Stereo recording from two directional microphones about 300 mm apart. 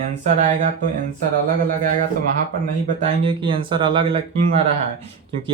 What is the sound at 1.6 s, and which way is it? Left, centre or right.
A man's voice, right.